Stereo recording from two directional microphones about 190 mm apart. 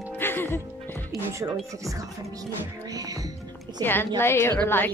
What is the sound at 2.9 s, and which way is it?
Music, 20° right (ahead or behind).